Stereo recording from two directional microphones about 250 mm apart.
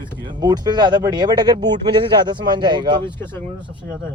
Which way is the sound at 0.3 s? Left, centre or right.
Centre.